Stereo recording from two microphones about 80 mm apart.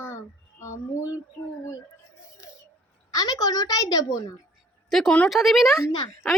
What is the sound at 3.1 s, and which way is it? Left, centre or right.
Speech, left.